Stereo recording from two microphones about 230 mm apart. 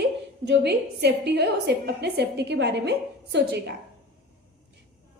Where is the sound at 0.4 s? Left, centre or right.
Right.